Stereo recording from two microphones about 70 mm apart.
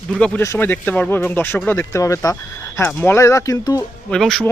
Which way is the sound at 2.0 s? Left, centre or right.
Left.